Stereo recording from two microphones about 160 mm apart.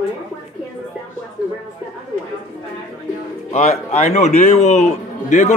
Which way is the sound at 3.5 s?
40° left (ahead or behind).